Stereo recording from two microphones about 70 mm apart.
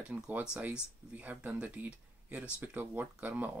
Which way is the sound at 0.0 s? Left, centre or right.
Centre.